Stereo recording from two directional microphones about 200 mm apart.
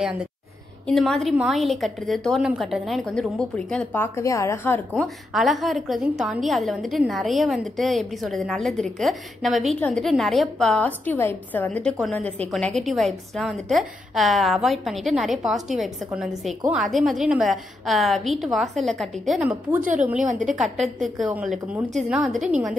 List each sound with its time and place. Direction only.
0.0 s a woman's voice: 5° right (ahead or behind)
19.8 s a woman's voice: 40° right (ahead or behind)
20.4 s a woman's voice: centre (ahead or behind)